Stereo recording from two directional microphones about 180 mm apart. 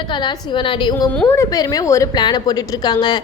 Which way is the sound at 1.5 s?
20° left (ahead or behind).